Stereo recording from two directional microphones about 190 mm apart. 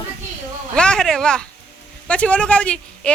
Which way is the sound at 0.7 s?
5° left (ahead or behind).